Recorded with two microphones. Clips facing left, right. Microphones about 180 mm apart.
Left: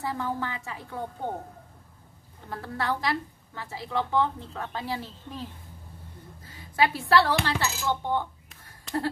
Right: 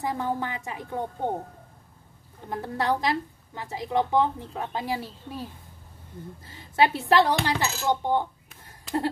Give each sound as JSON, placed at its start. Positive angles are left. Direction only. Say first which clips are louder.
{"t": 0.0, "sound": "a woman's voice", "louder": "right 2 dB", "side_deg": -20}
{"t": 2.5, "sound": "a woman's voice", "louder": "right 4 dB", "side_deg": -20}
{"t": 6.4, "sound": "a woman's voice", "louder": "right 3 dB", "side_deg": -25}